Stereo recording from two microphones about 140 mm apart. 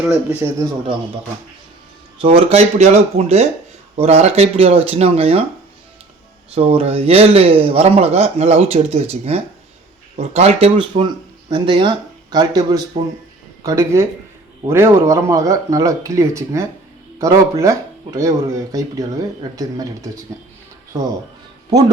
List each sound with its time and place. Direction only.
0.1 s speech: 20° right (ahead or behind)
2.2 s a man's voice: 45° right (ahead or behind)
6.5 s a man's voice: 45° right (ahead or behind); by 20.1 s 25° right (ahead or behind)